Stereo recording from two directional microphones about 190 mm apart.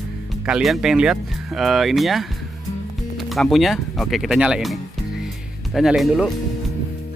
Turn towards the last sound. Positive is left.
turn(degrees=0)  # may be behind; listen again after turning